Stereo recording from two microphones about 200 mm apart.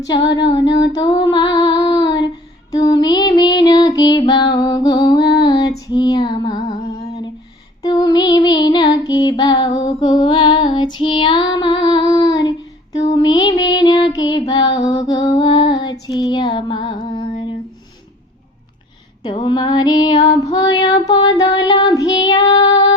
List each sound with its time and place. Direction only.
0.1 s female singing: 20° left (ahead or behind)
2.7 s music: 20° left (ahead or behind)
7.8 s child singing: 20° left (ahead or behind)
13.1 s music: 20° left (ahead or behind)
14.2 s child singing: 20° left (ahead or behind)
19.2 s female singing: 25° left (ahead or behind)